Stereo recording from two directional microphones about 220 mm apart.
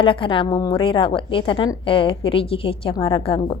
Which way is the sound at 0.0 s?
20° left (ahead or behind).